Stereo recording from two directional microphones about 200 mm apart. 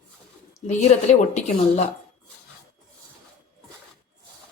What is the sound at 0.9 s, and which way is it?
Speech, 30° left (ahead or behind).